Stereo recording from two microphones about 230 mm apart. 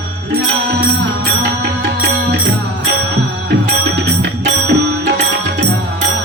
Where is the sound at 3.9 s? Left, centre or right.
Right.